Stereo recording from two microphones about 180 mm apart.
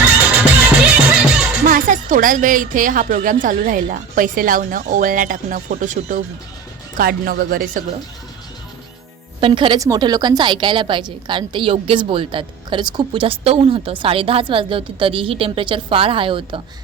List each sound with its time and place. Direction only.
0.2 s music: 5° right (ahead or behind)
1.6 s speech: 45° right (ahead or behind)
6.9 s speech: 55° right (ahead or behind)
9.4 s a woman's voice: 25° right (ahead or behind)